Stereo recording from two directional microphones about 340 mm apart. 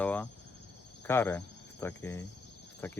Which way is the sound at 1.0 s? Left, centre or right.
Centre.